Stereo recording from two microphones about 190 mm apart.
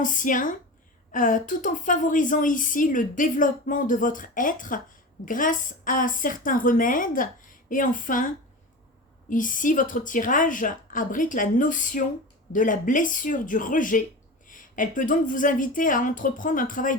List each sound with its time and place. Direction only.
0.0 s a woman's voice: 45° left (ahead or behind)
9.3 s a woman's voice: 45° left (ahead or behind)